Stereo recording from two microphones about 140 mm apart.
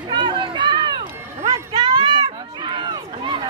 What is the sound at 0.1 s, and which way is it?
Run, 35° right (ahead or behind).